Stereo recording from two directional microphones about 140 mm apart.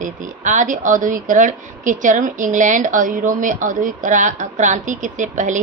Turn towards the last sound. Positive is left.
turn(degrees=-65)  # may be behind; listen again after turning